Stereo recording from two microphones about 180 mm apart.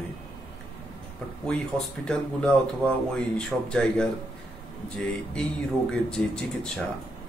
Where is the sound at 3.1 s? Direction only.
5° left (ahead or behind).